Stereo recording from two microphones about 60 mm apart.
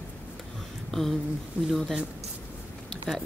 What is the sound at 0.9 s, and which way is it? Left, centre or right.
Speech, centre.